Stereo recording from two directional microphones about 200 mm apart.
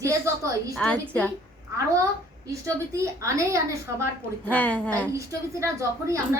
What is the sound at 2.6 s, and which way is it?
A woman's voice, 15° right (ahead or behind).